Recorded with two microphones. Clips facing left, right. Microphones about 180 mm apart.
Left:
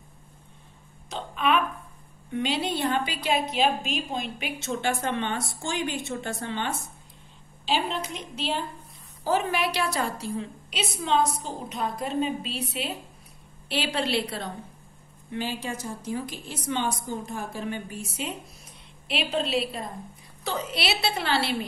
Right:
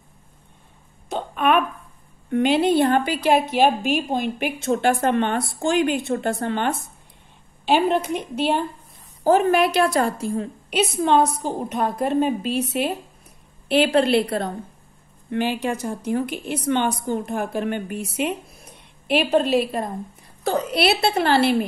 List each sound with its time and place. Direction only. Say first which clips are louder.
1.0 s hiccup: right 6 dB; 55° right (ahead or behind)
2.3 s a woman's voice: right 10 dB; 55° right (ahead or behind)
13.7 s a woman's voice: right 11 dB; 55° right (ahead or behind)
15.3 s a woman's voice: right 8 dB; 65° right (ahead or behind)